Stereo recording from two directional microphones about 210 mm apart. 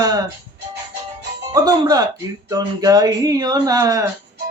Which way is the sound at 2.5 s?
20° right (ahead or behind).